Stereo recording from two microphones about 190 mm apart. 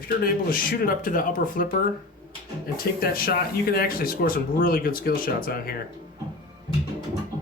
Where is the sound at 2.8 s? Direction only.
50° left (ahead or behind).